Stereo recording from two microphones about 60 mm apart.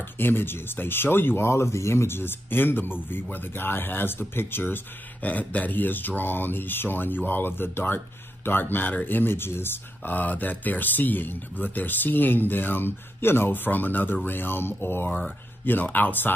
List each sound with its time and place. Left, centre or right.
0.2 s speech: left